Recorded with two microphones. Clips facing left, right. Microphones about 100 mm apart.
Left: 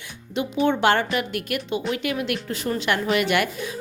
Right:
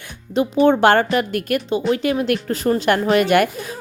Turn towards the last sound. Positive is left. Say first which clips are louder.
# right 6 dB
turn(degrees=-45)  # may be behind; listen again after turning